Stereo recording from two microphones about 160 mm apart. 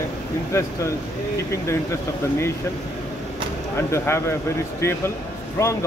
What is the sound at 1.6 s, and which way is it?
Speech, 15° left (ahead or behind).